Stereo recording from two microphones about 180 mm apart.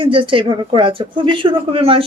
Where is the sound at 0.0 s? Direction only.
30° right (ahead or behind).